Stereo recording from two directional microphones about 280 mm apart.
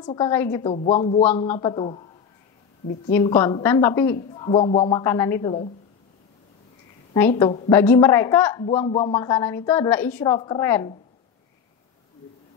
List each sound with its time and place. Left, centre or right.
0.0 s a woman's voice: centre
0.6 s a woman's voice: centre
3.1 s a woman's voice: centre
7.3 s speech: centre
7.7 s a woman's voice: centre
8.8 s speech: centre
9.1 s a woman's voice: centre